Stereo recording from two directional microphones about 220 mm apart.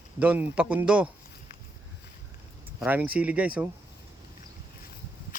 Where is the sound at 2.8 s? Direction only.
10° right (ahead or behind).